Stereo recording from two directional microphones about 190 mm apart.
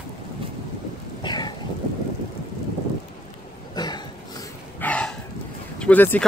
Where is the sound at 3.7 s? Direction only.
20° left (ahead or behind).